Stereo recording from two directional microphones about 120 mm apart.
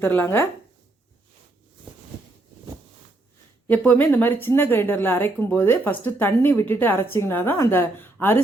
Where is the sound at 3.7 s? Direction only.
15° left (ahead or behind).